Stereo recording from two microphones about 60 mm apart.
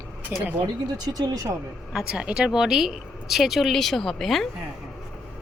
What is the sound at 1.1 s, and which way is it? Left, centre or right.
Speech, right.